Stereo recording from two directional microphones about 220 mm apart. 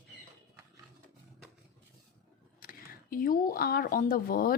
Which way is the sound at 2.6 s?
40° left (ahead or behind).